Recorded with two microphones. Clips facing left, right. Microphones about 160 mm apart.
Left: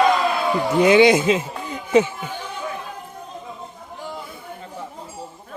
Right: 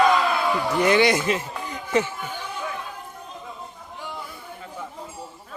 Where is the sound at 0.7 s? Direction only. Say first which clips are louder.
Left 6 dB; 20° left (ahead or behind).